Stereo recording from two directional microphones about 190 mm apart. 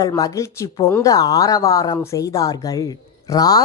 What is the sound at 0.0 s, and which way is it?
Speech, 20° left (ahead or behind).